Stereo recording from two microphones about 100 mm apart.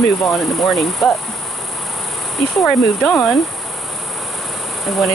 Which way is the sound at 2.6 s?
10° left (ahead or behind).